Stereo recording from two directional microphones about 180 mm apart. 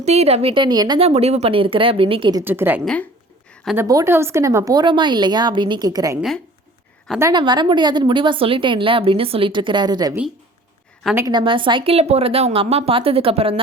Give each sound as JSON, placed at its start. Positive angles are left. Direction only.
{"t": 0.0, "sound": "a woman's voice", "side_deg": -35}
{"t": 2.4, "sound": "a woman's voice", "side_deg": -10}
{"t": 2.8, "sound": "speech", "side_deg": 5}
{"t": 3.5, "sound": "a sound", "side_deg": 0}
{"t": 3.8, "sound": "a woman's voice", "side_deg": -15}
{"t": 7.2, "sound": "a woman's voice", "side_deg": -20}
{"t": 11.3, "sound": "a woman's voice", "side_deg": -30}